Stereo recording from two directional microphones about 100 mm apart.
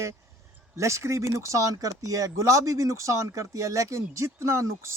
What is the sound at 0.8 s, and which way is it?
Speech, 30° right (ahead or behind).